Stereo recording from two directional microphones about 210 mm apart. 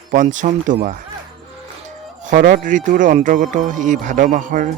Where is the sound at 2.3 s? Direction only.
40° right (ahead or behind).